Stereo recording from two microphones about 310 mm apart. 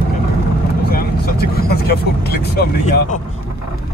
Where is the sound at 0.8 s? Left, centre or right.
Left.